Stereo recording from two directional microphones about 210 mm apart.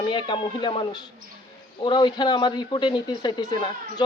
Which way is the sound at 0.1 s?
20° left (ahead or behind).